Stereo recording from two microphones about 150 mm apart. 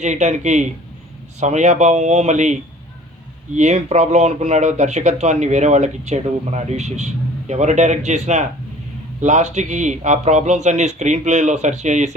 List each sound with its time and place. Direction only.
0.0 s speech: 50° right (ahead or behind)